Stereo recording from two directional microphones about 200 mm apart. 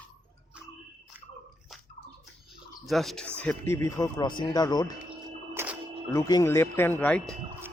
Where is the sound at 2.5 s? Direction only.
Centre (ahead or behind); by 4.9 s 20° left (ahead or behind).